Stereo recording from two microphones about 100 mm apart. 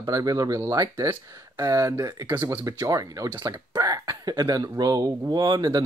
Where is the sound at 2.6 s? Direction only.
35° right (ahead or behind).